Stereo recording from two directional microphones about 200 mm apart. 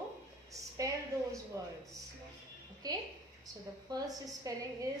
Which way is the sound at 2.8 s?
20° right (ahead or behind).